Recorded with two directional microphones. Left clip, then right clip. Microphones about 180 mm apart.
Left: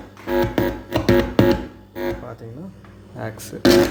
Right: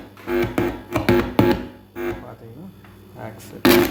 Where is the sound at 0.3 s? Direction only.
10° left (ahead or behind).